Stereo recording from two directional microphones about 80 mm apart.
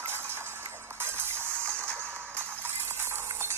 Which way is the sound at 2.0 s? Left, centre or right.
Right.